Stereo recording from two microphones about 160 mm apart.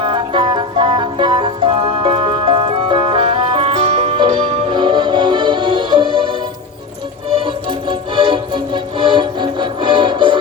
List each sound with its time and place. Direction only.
0.0 s music: 30° right (ahead or behind)
7.4 s music: 30° right (ahead or behind)